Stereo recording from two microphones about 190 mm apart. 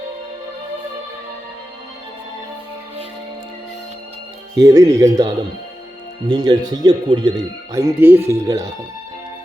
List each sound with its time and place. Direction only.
4.5 s speech: 20° right (ahead or behind)